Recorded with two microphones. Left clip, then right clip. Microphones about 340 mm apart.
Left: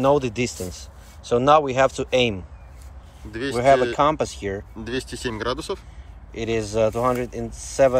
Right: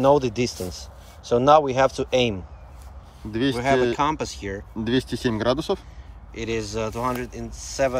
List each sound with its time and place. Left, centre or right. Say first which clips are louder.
0.0 s speech: right 1 dB; centre
3.3 s speech: right 4 dB; centre
3.9 s speech: left 4 dB; centre
4.8 s speech: right 5 dB; centre
6.3 s speech: left 4 dB; centre